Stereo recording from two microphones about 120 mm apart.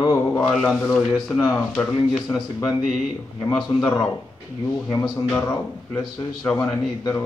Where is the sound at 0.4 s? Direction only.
5° left (ahead or behind).